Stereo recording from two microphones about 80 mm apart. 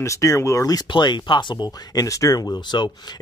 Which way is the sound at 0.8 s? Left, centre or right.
Left.